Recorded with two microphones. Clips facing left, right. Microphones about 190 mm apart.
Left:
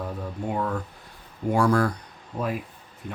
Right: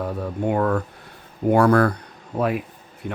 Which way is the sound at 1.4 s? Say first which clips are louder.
Right 5 dB; 60° right (ahead or behind).